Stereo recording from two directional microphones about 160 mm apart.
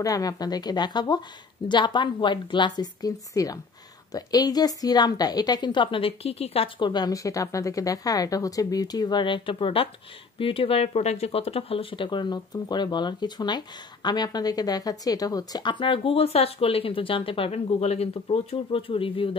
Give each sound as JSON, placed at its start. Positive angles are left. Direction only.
{"t": 0.0, "sound": "a woman's voice", "side_deg": 20}